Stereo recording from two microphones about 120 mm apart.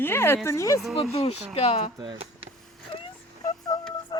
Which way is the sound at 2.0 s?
50° right (ahead or behind).